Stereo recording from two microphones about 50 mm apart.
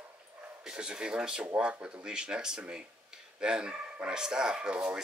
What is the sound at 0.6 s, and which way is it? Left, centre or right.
Speech, centre.